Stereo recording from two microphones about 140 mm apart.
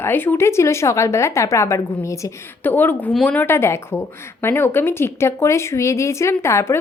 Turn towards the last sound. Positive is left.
turn(degrees=20)  # may be behind; listen again after turning